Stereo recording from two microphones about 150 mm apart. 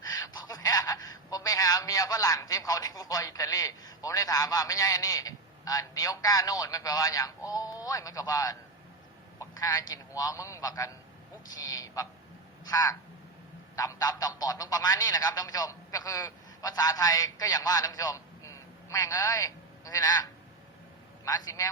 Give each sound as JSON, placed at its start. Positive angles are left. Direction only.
{"t": 0.4, "sound": "a man's voice", "side_deg": 25}
{"t": 11.4, "sound": "a sound", "side_deg": 25}
{"t": 13.7, "sound": "a man's voice", "side_deg": 25}
{"t": 21.2, "sound": "a man's voice", "side_deg": 25}